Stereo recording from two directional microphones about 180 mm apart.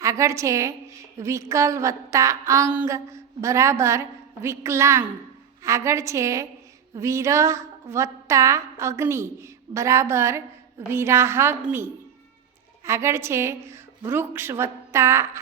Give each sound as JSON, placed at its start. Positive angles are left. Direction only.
{"t": 0.0, "sound": "a woman's voice", "side_deg": -15}